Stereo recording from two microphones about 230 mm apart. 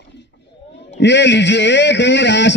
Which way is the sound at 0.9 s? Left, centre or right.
Left.